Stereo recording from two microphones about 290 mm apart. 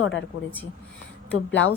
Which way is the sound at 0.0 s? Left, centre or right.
Left.